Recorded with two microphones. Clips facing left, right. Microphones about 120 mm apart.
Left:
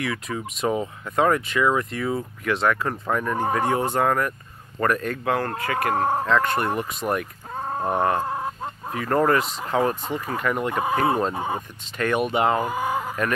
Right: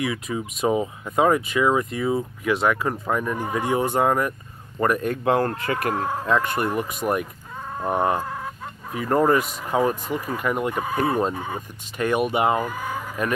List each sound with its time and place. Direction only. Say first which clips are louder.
0.0 s speech: right 2 dB; 15° right (ahead or behind)
5.1 s speech: right 4 dB; 25° right (ahead or behind)
5.8 s speech: left 3 dB; 40° left (ahead or behind)
6.2 s speech: left 1 dB; 15° right (ahead or behind)
6.5 s speech: even; 45° left (ahead or behind)
7.0 s speech: right 1 dB; 5° right (ahead or behind)
7.5 s a sound: left 5 dB; 45° left (ahead or behind)
7.9 s speech: right 1 dB; 15° right (ahead or behind)
10.8 s speech: left 3 dB; 25° left (ahead or behind)
12.0 s speech: right 1 dB; 10° right (ahead or behind)
12.5 s speech: left 3 dB; 30° left (ahead or behind)